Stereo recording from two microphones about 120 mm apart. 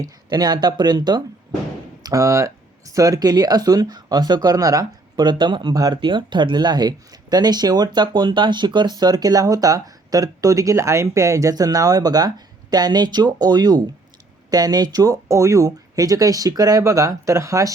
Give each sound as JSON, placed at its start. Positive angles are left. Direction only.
{"t": 0.0, "sound": "speech", "side_deg": -35}
{"t": 5.7, "sound": "speech", "side_deg": -30}
{"t": 6.0, "sound": "speech", "side_deg": -40}